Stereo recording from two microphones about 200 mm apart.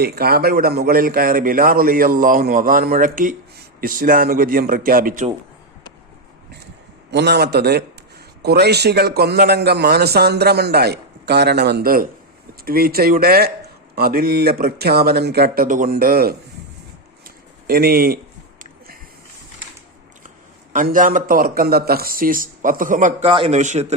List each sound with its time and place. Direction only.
0.0 s a man's voice: 50° right (ahead or behind)
7.1 s a man's voice: 55° right (ahead or behind)
17.2 s a sound: 50° right (ahead or behind)
20.7 s a man's voice: 40° right (ahead or behind)